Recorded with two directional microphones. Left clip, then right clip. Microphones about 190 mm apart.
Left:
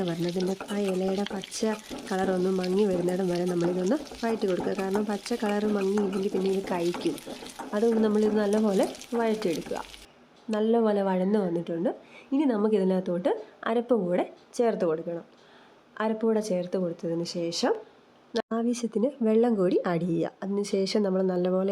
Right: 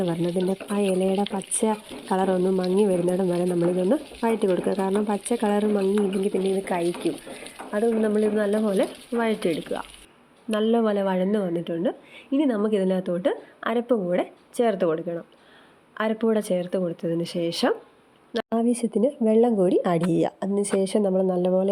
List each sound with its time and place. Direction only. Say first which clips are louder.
0.0 s a woman's voice: right 4 dB; centre (ahead or behind)